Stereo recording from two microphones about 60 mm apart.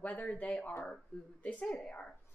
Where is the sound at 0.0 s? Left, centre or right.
Left.